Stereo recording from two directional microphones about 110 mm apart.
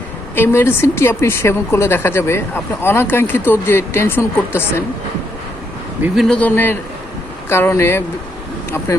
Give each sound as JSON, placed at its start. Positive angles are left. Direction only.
{"t": 0.3, "sound": "speech", "side_deg": 20}
{"t": 6.1, "sound": "a man's voice", "side_deg": 5}